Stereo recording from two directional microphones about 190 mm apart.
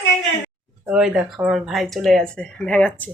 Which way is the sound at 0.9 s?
5° right (ahead or behind).